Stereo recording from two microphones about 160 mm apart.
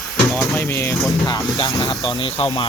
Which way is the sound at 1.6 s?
25° left (ahead or behind).